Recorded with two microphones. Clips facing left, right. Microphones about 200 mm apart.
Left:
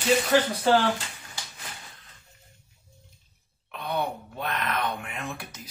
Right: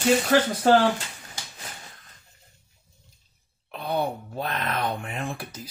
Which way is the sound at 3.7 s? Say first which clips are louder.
Right 3 dB; 30° right (ahead or behind).